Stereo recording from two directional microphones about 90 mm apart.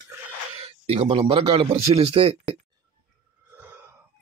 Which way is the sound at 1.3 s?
85° right.